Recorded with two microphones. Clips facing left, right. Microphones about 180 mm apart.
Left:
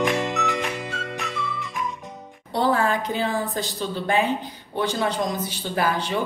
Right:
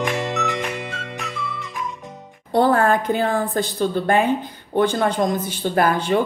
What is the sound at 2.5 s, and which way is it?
A woman's voice, 50° right (ahead or behind).